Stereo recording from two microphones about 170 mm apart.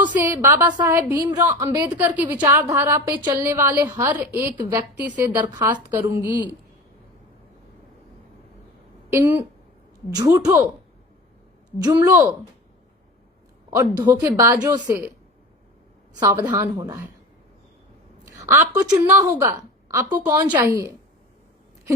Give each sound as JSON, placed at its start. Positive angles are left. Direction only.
{"t": 0.0, "sound": "a woman's voice", "side_deg": -10}
{"t": 1.8, "sound": "a woman's voice", "side_deg": -10}
{"t": 5.4, "sound": "speech", "side_deg": -25}
{"t": 5.9, "sound": "a woman's voice", "side_deg": -10}
{"t": 9.1, "sound": "a woman's voice", "side_deg": -10}
{"t": 11.8, "sound": "a woman's voice", "side_deg": -15}
{"t": 13.7, "sound": "a woman's voice", "side_deg": -20}
{"t": 16.2, "sound": "speech", "side_deg": -25}
{"t": 18.3, "sound": "a woman's voice", "side_deg": -15}